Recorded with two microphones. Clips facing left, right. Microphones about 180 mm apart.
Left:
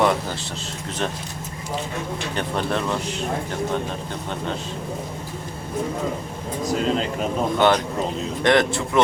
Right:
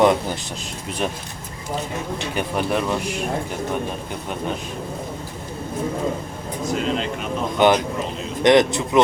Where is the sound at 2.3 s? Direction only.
10° right (ahead or behind).